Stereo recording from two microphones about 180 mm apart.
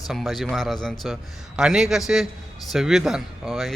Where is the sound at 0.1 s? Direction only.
Centre (ahead or behind).